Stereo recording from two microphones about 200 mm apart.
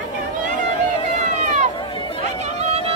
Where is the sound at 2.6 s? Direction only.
30° right (ahead or behind).